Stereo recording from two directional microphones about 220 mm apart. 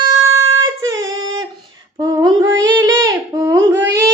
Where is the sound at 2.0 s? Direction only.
15° right (ahead or behind).